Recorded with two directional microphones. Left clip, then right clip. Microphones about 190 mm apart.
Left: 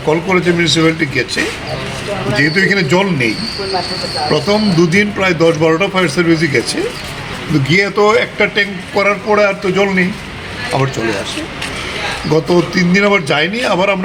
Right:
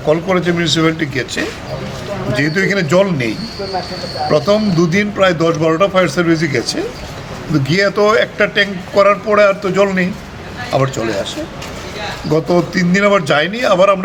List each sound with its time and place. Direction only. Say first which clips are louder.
0.1 s speech: left 1 dB; 25° right (ahead or behind)
2.4 s speech: left 3 dB; 25° right (ahead or behind)
4.3 s speech: right 2 dB; 30° right (ahead or behind)
7.7 s speech: left 1 dB; 25° right (ahead or behind)
12.3 s speech: left 1 dB; 30° right (ahead or behind)